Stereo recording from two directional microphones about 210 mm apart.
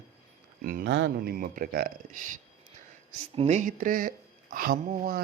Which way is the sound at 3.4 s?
35° right (ahead or behind).